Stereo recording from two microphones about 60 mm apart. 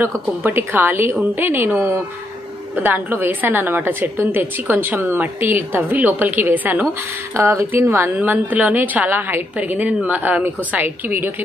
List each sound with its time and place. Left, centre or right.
0.0 s a woman's voice: right
2.7 s a woman's voice: right
7.3 s a woman's voice: right
8.2 s a woman's voice: right